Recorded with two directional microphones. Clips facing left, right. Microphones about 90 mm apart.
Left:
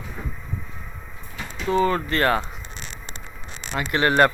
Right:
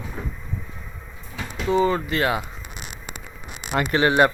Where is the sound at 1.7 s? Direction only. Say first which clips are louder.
Even; 20° right (ahead or behind).